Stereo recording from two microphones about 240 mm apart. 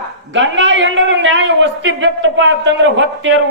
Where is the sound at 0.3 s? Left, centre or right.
Right.